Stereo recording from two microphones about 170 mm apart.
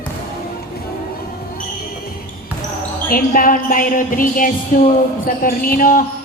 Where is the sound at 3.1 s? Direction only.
55° left (ahead or behind).